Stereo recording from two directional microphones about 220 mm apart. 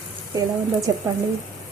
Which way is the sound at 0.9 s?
15° right (ahead or behind).